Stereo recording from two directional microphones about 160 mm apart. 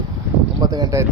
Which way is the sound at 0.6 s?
25° right (ahead or behind).